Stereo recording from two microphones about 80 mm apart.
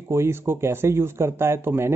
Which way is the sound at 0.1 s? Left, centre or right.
Right.